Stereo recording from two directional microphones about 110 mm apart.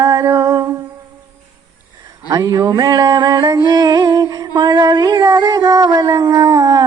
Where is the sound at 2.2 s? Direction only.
35° right (ahead or behind).